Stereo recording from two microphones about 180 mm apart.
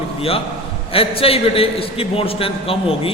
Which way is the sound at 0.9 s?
30° left (ahead or behind).